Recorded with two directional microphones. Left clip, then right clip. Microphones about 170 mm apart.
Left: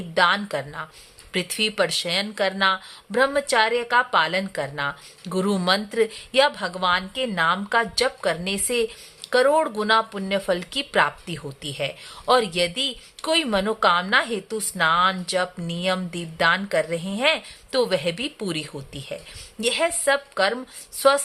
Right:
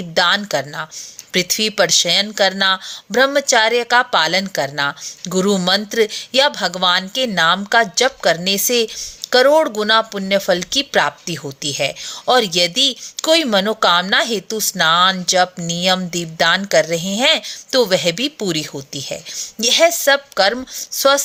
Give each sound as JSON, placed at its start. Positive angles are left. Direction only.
{"t": 0.1, "sound": "speech", "side_deg": -25}